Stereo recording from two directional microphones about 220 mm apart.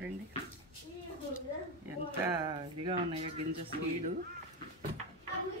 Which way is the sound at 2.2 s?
20° right (ahead or behind).